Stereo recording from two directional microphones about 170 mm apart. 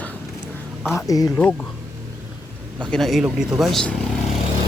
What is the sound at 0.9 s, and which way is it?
Speech, 20° left (ahead or behind).